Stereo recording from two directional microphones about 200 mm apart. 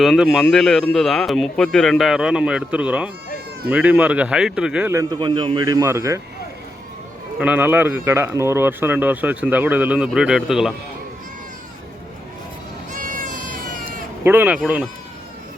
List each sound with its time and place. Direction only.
0.0 s speech: centre (ahead or behind)
7.3 s speech: 5° right (ahead or behind)
12.9 s a sound: 40° right (ahead or behind)
14.3 s speech: 10° right (ahead or behind)